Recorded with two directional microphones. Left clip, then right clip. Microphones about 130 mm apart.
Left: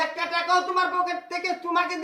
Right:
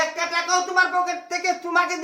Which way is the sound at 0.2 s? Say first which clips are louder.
Right 1 dB; 25° right (ahead or behind).